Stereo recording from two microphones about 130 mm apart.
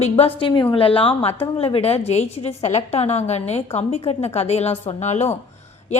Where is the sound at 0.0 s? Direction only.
50° left (ahead or behind).